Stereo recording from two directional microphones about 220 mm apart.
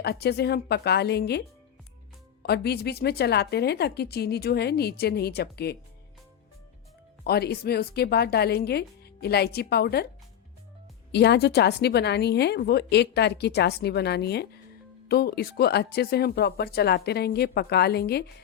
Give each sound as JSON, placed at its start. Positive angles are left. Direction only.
{"t": 0.0, "sound": "a woman's voice", "side_deg": 45}
{"t": 7.3, "sound": "a woman's voice", "side_deg": 45}
{"t": 11.1, "sound": "a woman's voice", "side_deg": 50}